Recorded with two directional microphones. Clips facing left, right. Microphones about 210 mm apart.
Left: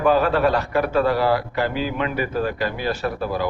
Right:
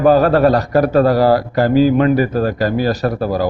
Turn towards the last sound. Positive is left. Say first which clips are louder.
# right 7 dB
turn(degrees=-40)  # may be behind; listen again after turning